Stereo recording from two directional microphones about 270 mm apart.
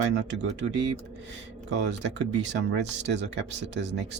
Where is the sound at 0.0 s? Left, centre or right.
Right.